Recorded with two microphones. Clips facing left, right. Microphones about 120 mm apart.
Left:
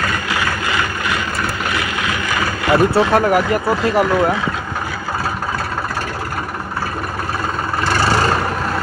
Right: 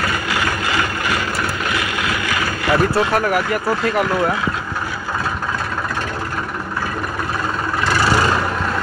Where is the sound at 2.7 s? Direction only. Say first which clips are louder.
Left 3 dB; 30° left (ahead or behind).